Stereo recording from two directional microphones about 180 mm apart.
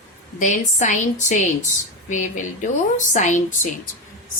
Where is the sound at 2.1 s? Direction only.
45° left (ahead or behind).